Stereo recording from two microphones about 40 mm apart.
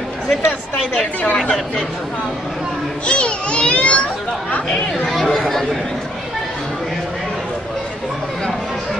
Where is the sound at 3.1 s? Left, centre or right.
Left.